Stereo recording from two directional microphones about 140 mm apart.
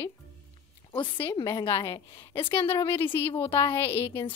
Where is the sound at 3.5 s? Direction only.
40° left (ahead or behind).